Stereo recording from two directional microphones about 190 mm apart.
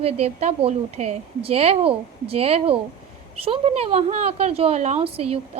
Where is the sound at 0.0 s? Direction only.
35° right (ahead or behind).